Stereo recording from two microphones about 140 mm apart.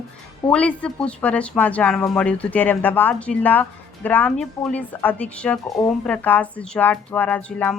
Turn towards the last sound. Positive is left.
turn(degrees=10)  # may be behind; listen again after turning